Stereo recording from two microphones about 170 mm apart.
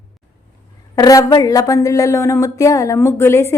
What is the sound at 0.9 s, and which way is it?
A woman's voice, 20° left (ahead or behind).